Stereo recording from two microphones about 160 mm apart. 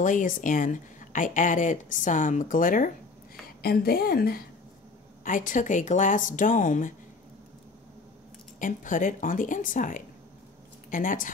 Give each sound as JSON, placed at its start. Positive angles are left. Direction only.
{"t": 0.0, "sound": "speech", "side_deg": 55}
{"t": 3.6, "sound": "a woman's voice", "side_deg": 75}
{"t": 5.2, "sound": "speech", "side_deg": 55}
{"t": 8.5, "sound": "speech", "side_deg": 55}